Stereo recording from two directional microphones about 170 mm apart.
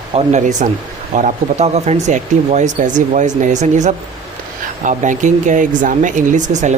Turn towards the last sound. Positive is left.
turn(degrees=-45)  # may be behind; listen again after turning